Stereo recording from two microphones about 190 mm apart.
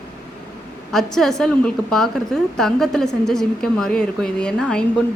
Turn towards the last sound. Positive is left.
turn(degrees=5)  # may be behind; listen again after turning